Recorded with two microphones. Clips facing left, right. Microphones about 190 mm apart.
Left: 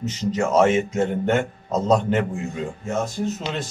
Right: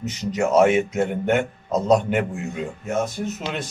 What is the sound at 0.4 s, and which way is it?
A man's voice, 15° right (ahead or behind).